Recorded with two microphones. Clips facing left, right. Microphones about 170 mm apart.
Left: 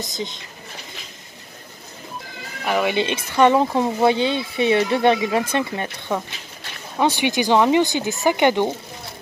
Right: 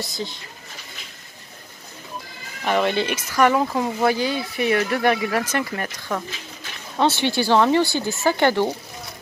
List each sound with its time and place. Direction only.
0.0 s speech: 20° left (ahead or behind)
2.6 s speech: 5° left (ahead or behind)
3.0 s speech: 25° left (ahead or behind)
7.0 s speech: 15° left (ahead or behind)